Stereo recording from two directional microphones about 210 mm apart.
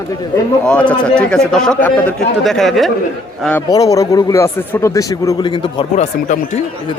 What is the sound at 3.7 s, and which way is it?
A man's voice, 15° left (ahead or behind).